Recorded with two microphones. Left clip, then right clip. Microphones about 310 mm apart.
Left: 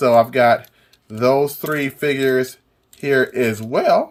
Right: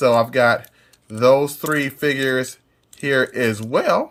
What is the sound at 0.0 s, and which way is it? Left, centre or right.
Speech, centre.